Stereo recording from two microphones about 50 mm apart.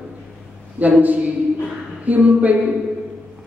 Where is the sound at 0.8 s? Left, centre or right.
Right.